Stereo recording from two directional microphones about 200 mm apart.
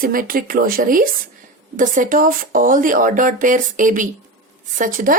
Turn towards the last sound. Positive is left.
turn(degrees=-45)  # may be behind; listen again after turning